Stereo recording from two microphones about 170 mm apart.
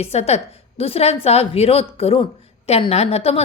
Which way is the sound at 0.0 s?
35° left (ahead or behind).